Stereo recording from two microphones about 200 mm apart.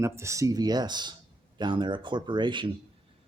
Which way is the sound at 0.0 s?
15° right (ahead or behind).